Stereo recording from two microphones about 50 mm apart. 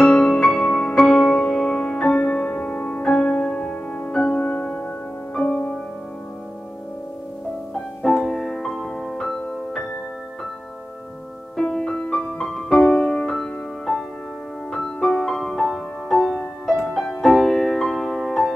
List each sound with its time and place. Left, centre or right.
0.0 s music: centre
7.7 s music: centre
11.5 s music: centre